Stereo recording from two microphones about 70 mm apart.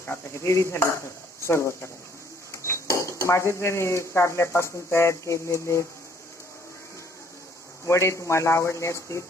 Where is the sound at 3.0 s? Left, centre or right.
Left.